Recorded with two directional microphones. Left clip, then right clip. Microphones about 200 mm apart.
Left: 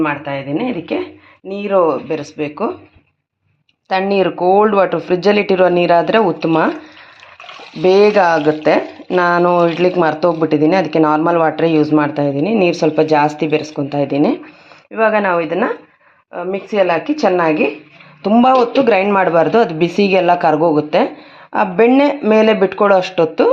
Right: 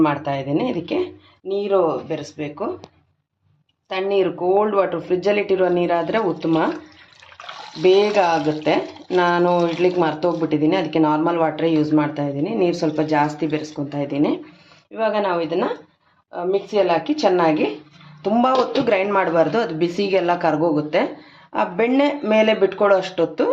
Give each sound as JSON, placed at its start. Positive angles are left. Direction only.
{"t": 0.0, "sound": "speech", "side_deg": 0}
{"t": 1.7, "sound": "speech", "side_deg": 30}
{"t": 3.8, "sound": "speech", "side_deg": 35}
{"t": 7.8, "sound": "speech", "side_deg": 30}
{"t": 16.7, "sound": "speech", "side_deg": 25}